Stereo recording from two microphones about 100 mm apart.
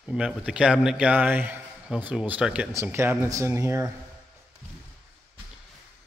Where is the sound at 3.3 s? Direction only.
30° right (ahead or behind).